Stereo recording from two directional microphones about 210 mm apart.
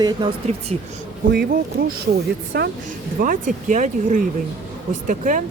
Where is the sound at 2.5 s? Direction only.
50° right (ahead or behind).